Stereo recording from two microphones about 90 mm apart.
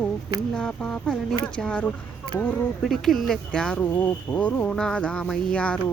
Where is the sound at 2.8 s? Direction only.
Centre (ahead or behind).